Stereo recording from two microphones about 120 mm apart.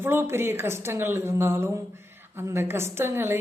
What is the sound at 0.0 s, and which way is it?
A woman's voice, 20° right (ahead or behind).